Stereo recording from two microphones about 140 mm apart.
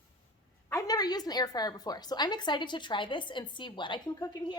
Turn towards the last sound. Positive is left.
turn(degrees=35)  # may be behind; listen again after turning